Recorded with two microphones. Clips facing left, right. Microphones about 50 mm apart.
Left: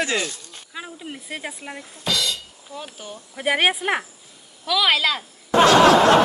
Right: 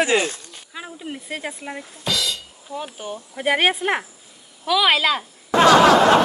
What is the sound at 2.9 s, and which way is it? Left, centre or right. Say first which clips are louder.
Speech: right 6 dB; right.